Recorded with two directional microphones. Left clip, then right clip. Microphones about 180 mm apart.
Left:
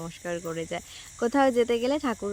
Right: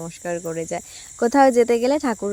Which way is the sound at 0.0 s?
30° right (ahead or behind).